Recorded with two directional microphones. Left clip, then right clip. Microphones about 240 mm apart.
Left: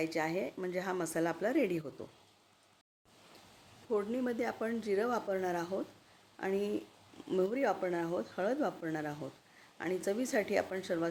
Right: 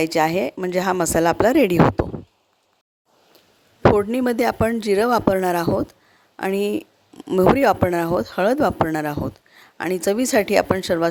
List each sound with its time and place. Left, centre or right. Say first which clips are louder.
0.0 s speech: right 16 dB; right
3.9 s speech: right 15 dB; right